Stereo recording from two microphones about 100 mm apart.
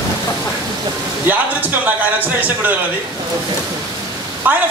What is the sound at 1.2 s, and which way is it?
A man's voice, 15° right (ahead or behind).